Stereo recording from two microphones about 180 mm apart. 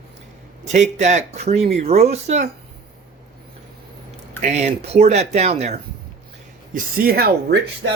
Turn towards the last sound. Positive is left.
turn(degrees=-60)  # may be behind; listen again after turning